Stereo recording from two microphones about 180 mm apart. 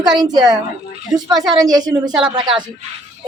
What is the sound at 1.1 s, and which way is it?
A woman's voice, 25° right (ahead or behind).